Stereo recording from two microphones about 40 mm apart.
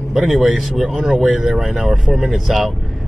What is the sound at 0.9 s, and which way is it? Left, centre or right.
Speech, centre.